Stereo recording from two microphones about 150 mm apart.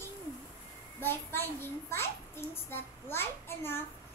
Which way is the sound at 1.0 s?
15° left (ahead or behind).